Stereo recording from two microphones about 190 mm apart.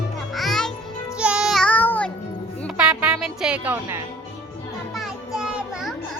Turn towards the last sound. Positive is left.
turn(degrees=-5)  # may be behind; listen again after turning